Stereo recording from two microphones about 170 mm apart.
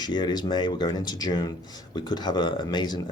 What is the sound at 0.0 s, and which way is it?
Speech, 25° left (ahead or behind).